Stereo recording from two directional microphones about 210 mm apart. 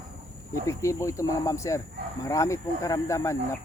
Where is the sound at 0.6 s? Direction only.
15° left (ahead or behind).